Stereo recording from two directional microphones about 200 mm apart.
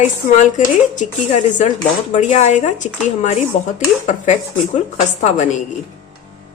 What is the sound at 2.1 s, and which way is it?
Speech, 35° left (ahead or behind).